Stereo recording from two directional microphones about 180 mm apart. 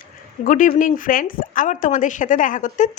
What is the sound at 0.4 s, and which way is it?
Speech, 45° left (ahead or behind).